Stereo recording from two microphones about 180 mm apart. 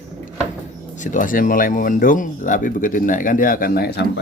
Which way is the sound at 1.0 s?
45° left (ahead or behind).